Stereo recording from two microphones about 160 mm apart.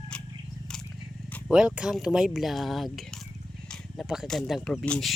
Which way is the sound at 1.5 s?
5° right (ahead or behind).